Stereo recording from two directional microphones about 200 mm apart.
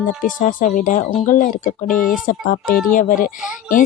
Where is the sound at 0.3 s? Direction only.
40° left (ahead or behind).